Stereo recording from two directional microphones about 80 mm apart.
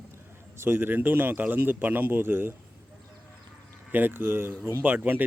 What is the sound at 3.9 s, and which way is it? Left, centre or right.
Speech, right.